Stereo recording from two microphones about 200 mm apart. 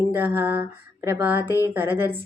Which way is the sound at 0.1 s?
10° right (ahead or behind).